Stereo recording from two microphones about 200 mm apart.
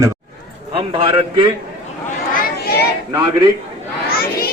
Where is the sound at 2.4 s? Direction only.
50° left (ahead or behind).